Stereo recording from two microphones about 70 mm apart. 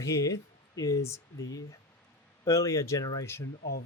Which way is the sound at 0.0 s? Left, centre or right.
Left.